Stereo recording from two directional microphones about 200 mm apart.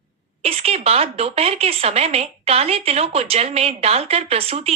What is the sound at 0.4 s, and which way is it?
Speech, 30° right (ahead or behind).